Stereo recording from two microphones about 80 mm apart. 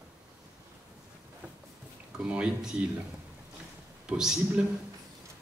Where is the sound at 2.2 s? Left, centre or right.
Centre.